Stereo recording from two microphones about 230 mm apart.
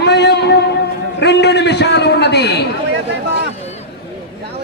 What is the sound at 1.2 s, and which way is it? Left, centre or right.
A man's voice, left.